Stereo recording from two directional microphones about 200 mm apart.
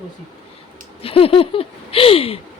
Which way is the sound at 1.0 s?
30° left (ahead or behind).